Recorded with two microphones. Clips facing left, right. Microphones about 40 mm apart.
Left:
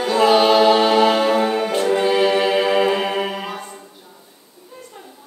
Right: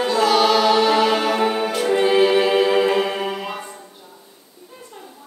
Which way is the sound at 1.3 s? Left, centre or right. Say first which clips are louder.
Left 2 dB; centre.